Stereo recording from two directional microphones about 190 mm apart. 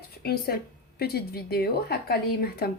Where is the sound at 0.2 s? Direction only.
55° left (ahead or behind).